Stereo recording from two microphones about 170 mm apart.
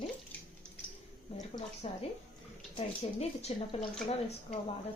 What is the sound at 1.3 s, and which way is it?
Speech, 35° left (ahead or behind).